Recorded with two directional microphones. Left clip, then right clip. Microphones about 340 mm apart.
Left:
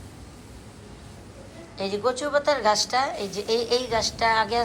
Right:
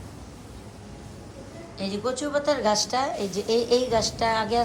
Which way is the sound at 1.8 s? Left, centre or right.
Centre.